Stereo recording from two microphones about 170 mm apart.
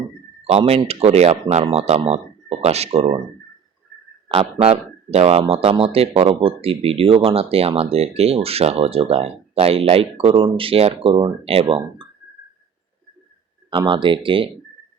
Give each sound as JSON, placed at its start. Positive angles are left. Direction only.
{"t": 0.4, "sound": "speech", "side_deg": -35}
{"t": 4.3, "sound": "speech", "side_deg": -35}
{"t": 13.7, "sound": "speech", "side_deg": -30}